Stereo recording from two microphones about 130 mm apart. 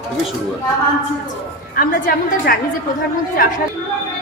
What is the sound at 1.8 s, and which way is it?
Speech, 90° left.